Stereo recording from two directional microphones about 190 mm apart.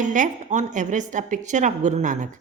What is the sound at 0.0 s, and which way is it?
A woman's voice, 40° right (ahead or behind).